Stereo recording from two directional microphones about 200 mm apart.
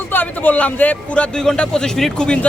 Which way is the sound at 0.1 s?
10° left (ahead or behind).